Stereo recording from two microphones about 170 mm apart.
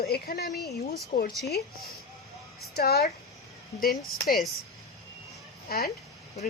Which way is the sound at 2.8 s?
65° left (ahead or behind).